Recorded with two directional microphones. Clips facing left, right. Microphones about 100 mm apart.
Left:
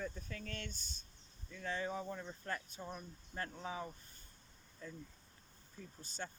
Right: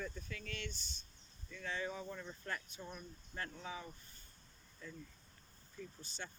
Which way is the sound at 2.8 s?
25° left (ahead or behind).